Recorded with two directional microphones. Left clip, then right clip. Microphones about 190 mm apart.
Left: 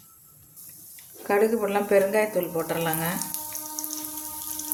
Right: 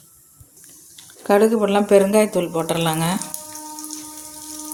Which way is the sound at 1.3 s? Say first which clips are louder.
Right 7 dB; 35° right (ahead or behind).